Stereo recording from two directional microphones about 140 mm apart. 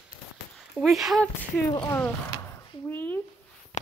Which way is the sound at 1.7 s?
20° left (ahead or behind).